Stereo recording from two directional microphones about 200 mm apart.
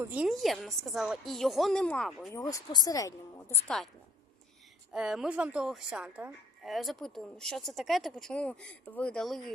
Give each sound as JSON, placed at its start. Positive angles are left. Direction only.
{"t": 0.0, "sound": "speech", "side_deg": -5}
{"t": 2.3, "sound": "speech", "side_deg": 15}
{"t": 4.9, "sound": "speech", "side_deg": -5}